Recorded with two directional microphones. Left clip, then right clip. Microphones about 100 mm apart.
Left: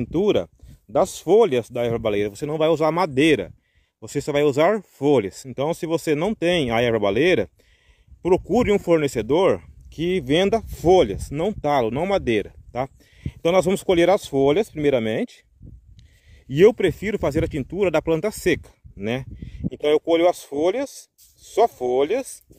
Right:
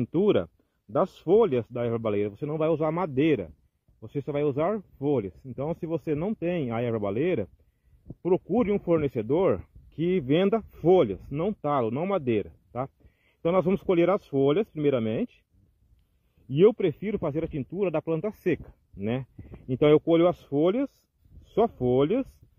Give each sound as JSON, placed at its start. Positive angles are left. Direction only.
{"t": 0.0, "sound": "speech", "side_deg": 40}
{"t": 4.0, "sound": "speech", "side_deg": 60}
{"t": 5.4, "sound": "speech", "side_deg": 40}
{"t": 6.2, "sound": "speech", "side_deg": 50}
{"t": 11.2, "sound": "speech", "side_deg": 65}
{"t": 16.4, "sound": "speech", "side_deg": 65}
{"t": 18.4, "sound": "speech", "side_deg": 45}
{"t": 19.8, "sound": "speech", "side_deg": 40}